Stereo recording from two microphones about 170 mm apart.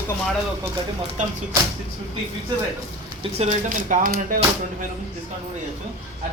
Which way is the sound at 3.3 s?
40° right (ahead or behind).